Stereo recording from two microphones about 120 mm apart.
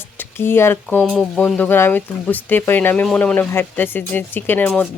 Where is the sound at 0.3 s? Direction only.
20° left (ahead or behind).